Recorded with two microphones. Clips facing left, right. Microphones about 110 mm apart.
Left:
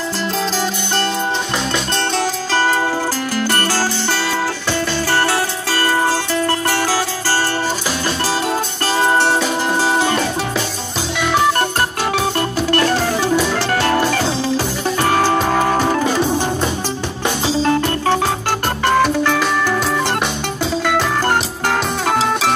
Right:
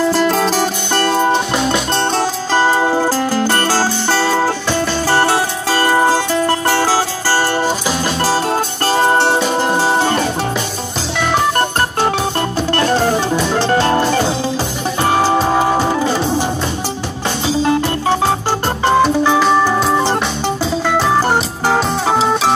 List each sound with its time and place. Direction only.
0.2 s music: 55° right (ahead or behind)
1.7 s music: 40° right (ahead or behind)
2.6 s music: 25° right (ahead or behind)
5.1 s music: 25° right (ahead or behind)
8.9 s music: 30° right (ahead or behind)
12.0 s music: 30° right (ahead or behind)
17.6 s music: 20° right (ahead or behind)